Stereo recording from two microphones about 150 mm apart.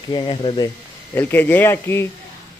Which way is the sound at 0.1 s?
30° left (ahead or behind).